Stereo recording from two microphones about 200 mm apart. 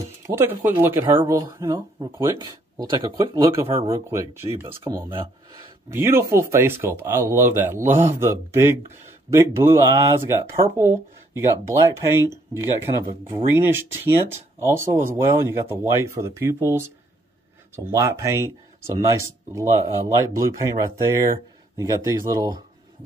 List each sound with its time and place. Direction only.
0.3 s speech: 10° right (ahead or behind)
5.9 s speech: 10° right (ahead or behind)
13.6 s speech: 10° right (ahead or behind)